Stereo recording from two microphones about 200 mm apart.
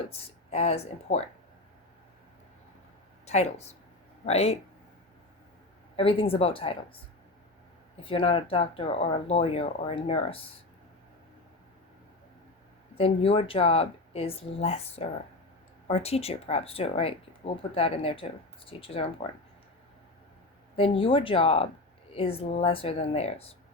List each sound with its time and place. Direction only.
0.1 s speech: 30° left (ahead or behind)
3.2 s speech: 35° left (ahead or behind)
6.0 s speech: 25° left (ahead or behind)
8.0 s speech: 25° left (ahead or behind)
13.0 s speech: 30° left (ahead or behind)
20.7 s speech: 25° left (ahead or behind)